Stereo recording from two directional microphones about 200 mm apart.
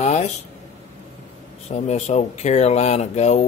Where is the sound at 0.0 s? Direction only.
35° left (ahead or behind).